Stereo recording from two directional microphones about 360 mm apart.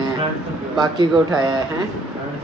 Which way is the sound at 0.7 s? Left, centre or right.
Centre.